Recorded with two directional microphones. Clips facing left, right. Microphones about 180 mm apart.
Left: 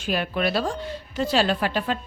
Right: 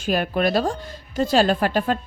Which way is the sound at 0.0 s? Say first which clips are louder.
Right 4 dB; 45° right (ahead or behind).